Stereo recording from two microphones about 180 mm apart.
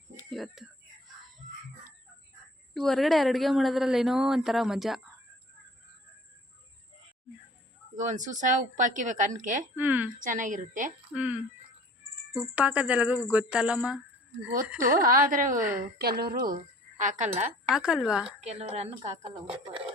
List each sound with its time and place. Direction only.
0.3 s speech: centre (ahead or behind)
2.7 s a woman's voice: centre (ahead or behind)
7.9 s speech: 45° right (ahead or behind)
9.7 s speech: 10° right (ahead or behind)
10.2 s speech: 45° right (ahead or behind)
11.1 s a woman's voice: 10° right (ahead or behind)
14.9 s speech: 50° right (ahead or behind)
15.8 s a woman's voice: 60° right (ahead or behind)
17.0 s speech: 45° right (ahead or behind)
17.7 s a woman's voice: 5° right (ahead or behind)
18.3 s speech: 35° right (ahead or behind)